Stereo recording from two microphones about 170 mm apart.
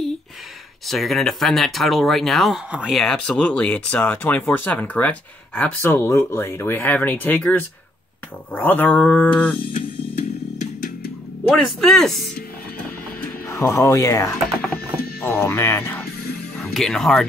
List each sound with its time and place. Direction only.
0.8 s speech: centre (ahead or behind)
9.8 s music: 40° left (ahead or behind)
11.4 s speech: 5° left (ahead or behind)
13.5 s speech: 15° left (ahead or behind)
16.5 s speech: centre (ahead or behind)